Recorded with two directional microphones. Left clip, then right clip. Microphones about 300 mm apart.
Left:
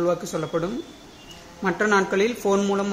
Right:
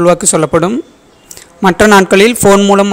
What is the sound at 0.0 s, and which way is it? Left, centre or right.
A man's voice, right.